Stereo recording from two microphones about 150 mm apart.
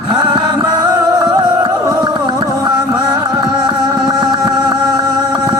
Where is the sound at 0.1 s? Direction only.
30° right (ahead or behind).